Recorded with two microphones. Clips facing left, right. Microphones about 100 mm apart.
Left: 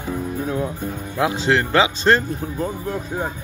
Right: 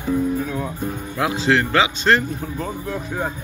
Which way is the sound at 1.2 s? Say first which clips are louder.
Even; 30° left (ahead or behind).